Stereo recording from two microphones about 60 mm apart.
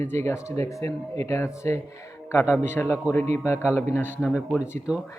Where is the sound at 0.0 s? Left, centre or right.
Left.